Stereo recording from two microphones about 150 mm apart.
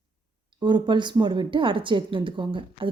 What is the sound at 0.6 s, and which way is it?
Speech, 30° right (ahead or behind).